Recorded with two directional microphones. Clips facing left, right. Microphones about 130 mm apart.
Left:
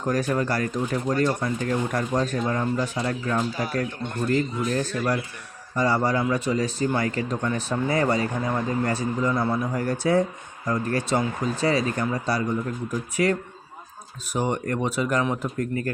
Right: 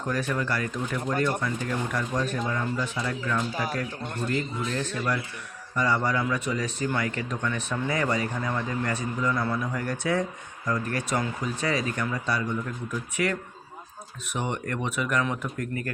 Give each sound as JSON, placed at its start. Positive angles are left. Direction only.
{"t": 0.1, "sound": "speech", "side_deg": 40}
{"t": 4.8, "sound": "speech", "side_deg": 35}